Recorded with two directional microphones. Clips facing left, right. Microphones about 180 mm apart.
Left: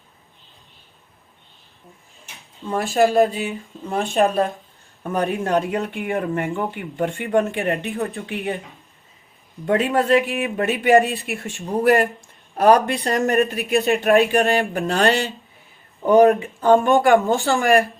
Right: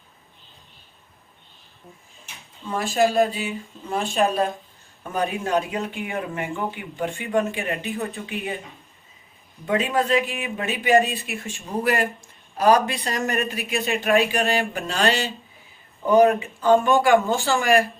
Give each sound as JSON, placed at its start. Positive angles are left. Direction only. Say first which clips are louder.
{"t": 2.7, "sound": "speech", "louder": "left 3 dB", "side_deg": 55}
{"t": 9.9, "sound": "speech", "louder": "left 5 dB", "side_deg": 60}
{"t": 11.8, "sound": "speech", "louder": "left 6 dB", "side_deg": 50}